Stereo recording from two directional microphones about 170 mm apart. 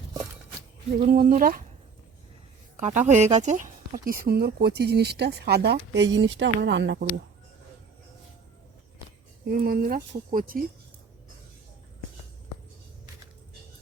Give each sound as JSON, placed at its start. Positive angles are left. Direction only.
{"t": 1.0, "sound": "speech", "side_deg": -55}
{"t": 2.7, "sound": "a woman's voice", "side_deg": -45}
{"t": 9.5, "sound": "speech", "side_deg": -60}